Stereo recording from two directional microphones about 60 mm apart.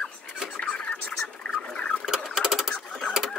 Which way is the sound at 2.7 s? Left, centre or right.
Centre.